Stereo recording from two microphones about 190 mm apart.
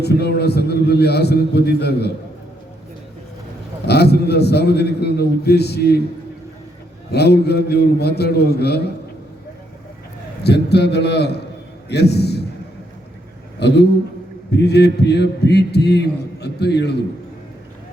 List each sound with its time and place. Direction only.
0.0 s a man's voice: 60° left (ahead or behind)
3.8 s a man's voice: 60° left (ahead or behind)
7.1 s a man's voice: 60° left (ahead or behind)
10.4 s a man's voice: 60° left (ahead or behind)
13.6 s a man's voice: 65° left (ahead or behind)